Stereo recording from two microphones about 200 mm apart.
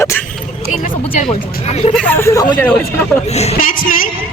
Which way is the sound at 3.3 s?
35° left (ahead or behind).